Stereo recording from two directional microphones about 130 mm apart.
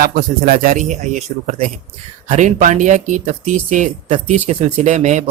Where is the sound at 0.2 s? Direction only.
90° right.